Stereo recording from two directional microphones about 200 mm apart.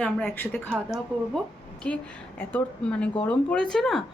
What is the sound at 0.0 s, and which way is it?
Speech, 5° left (ahead or behind).